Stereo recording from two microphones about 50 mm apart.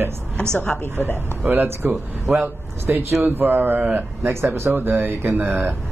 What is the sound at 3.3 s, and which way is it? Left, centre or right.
Speech, right.